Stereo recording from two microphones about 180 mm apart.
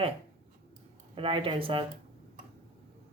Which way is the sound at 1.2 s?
30° right (ahead or behind).